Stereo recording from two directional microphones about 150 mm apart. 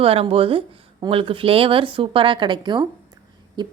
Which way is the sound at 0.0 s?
40° right (ahead or behind).